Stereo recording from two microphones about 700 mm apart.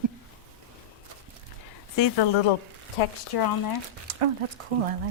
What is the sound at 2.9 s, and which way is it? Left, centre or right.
Speech, left.